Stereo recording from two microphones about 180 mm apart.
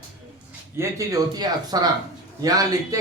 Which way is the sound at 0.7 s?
15° right (ahead or behind).